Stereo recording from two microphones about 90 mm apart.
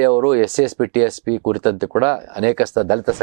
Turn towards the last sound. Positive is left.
turn(degrees=-15)  # may be behind; listen again after turning